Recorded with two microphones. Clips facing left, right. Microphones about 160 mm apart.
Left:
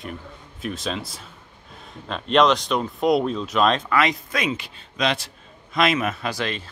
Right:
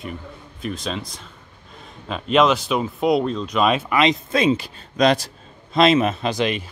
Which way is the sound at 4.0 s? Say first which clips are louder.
Right 4 dB; 25° right (ahead or behind).